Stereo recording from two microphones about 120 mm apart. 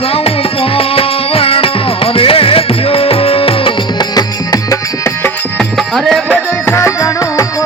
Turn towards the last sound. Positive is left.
turn(degrees=25)  # may be behind; listen again after turning